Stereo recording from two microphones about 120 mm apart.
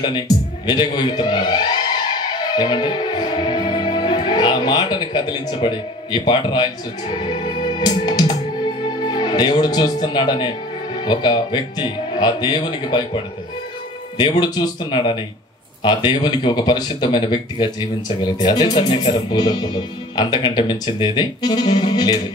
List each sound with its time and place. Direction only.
0.3 s music: 35° left (ahead or behind)
0.7 s speech: 40° left (ahead or behind)
14.4 s speech: 45° left (ahead or behind)